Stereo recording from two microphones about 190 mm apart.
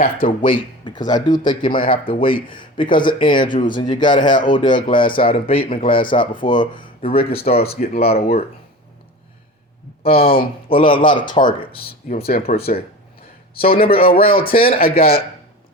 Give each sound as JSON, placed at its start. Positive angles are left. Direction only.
{"t": 0.2, "sound": "speech", "side_deg": 40}
{"t": 0.9, "sound": "speech", "side_deg": 20}
{"t": 7.8, "sound": "speech", "side_deg": 55}
{"t": 10.0, "sound": "speech", "side_deg": 50}
{"t": 10.2, "sound": "speech", "side_deg": 30}
{"t": 12.0, "sound": "speech", "side_deg": 40}
{"t": 12.5, "sound": "a man's voice", "side_deg": 55}